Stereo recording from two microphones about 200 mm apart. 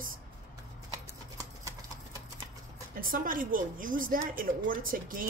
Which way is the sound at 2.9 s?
45° right (ahead or behind).